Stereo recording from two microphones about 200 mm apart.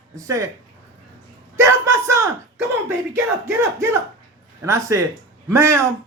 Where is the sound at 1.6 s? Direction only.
15° right (ahead or behind).